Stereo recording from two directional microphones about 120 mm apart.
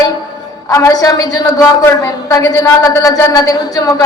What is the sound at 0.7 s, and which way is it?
A woman's voice, 25° left (ahead or behind).